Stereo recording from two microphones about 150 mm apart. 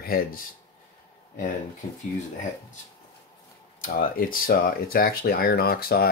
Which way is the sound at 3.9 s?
70° left (ahead or behind).